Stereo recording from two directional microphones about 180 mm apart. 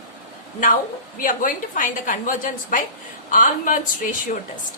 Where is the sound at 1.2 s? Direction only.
50° left (ahead or behind).